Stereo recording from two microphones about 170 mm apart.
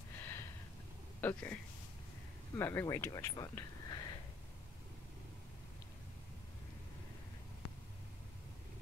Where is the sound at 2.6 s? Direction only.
15° left (ahead or behind).